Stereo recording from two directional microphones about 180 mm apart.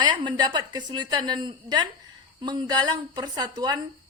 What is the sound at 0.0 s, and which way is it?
Speech, 25° right (ahead or behind).